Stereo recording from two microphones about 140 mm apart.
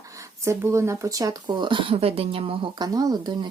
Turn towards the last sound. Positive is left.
turn(degrees=-35)  # may be behind; listen again after turning